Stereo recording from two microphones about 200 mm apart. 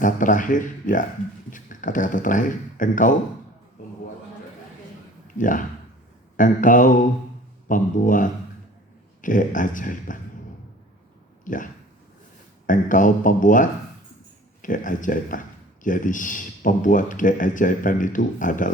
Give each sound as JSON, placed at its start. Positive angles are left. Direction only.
{"t": 0.0, "sound": "a man's voice", "side_deg": 40}
{"t": 3.8, "sound": "a sound", "side_deg": 45}
{"t": 5.4, "sound": "a man's voice", "side_deg": 40}
{"t": 11.4, "sound": "a man's voice", "side_deg": 40}